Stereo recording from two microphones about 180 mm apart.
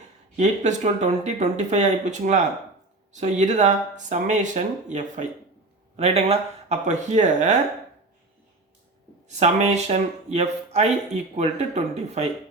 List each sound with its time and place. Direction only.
0.3 s speech: 40° right (ahead or behind)
9.3 s speech: 40° right (ahead or behind)